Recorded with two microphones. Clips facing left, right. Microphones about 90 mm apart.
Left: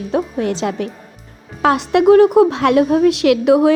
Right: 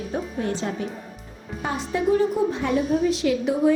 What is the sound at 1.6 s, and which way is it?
A woman's voice, 80° left.